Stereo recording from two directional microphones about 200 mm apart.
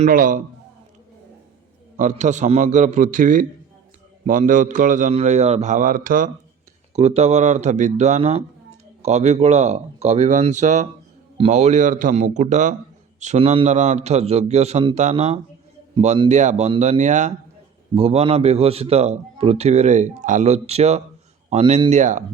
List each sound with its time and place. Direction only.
0.0 s speech: 40° right (ahead or behind)
2.0 s a man's voice: 35° right (ahead or behind)